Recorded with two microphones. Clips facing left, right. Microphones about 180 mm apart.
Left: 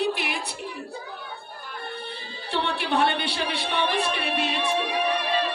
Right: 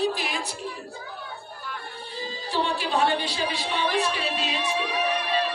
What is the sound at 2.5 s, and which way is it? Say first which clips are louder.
A woman's voice: even; 65° left (ahead or behind).